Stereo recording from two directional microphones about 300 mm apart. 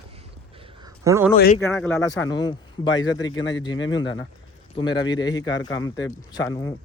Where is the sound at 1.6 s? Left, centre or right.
Centre.